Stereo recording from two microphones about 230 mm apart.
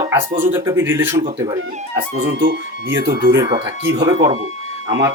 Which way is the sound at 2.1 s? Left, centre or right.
Right.